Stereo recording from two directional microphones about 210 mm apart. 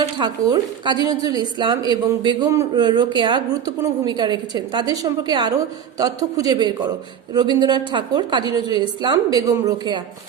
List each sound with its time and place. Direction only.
0.0 s a woman's voice: 20° right (ahead or behind)